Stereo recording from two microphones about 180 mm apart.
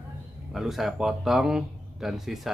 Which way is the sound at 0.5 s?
Centre (ahead or behind).